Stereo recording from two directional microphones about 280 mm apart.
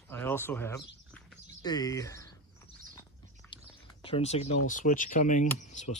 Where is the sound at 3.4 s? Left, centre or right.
Centre.